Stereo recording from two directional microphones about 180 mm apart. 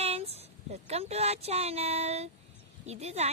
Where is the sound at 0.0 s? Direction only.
35° right (ahead or behind).